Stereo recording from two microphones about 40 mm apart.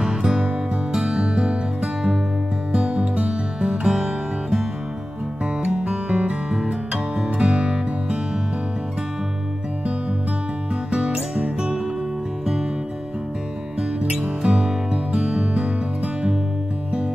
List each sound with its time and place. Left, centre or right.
0.0 s music: centre
2.7 s music: right
5.6 s music: right
10.9 s music: right
14.2 s music: right
15.6 s music: right